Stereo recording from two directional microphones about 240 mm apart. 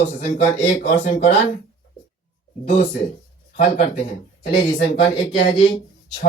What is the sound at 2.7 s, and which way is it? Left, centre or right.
Speech, left.